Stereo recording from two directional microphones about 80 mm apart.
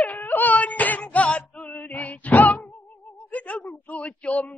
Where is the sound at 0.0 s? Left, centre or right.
Left.